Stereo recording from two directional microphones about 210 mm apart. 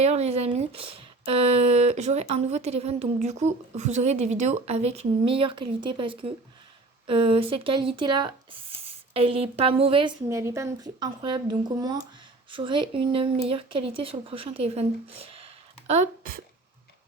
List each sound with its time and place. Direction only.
0.0 s speech: 30° right (ahead or behind)
10.2 s speech: 15° right (ahead or behind); by 16.4 s 40° right (ahead or behind)